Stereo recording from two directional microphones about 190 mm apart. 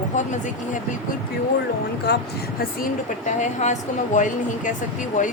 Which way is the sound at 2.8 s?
40° left (ahead or behind).